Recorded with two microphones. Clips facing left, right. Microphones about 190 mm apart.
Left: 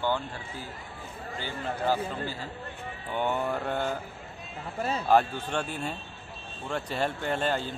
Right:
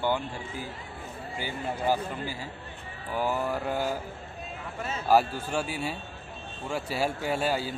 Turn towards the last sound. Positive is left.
turn(degrees=-5)  # may be behind; listen again after turning